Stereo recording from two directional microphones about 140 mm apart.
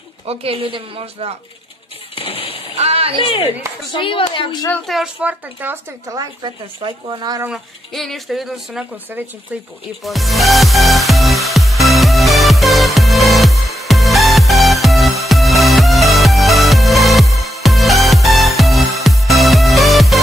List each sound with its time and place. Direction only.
0.3 s a woman's voice: 45° right (ahead or behind)
2.1 s music: 40° left (ahead or behind)
2.7 s a sound: 45° right (ahead or behind)
3.9 s speech: 40° left (ahead or behind)
4.8 s speech: centre (ahead or behind)
6.1 s speech: 30° right (ahead or behind)
7.4 s speech: centre (ahead or behind)
10.0 s music: centre (ahead or behind)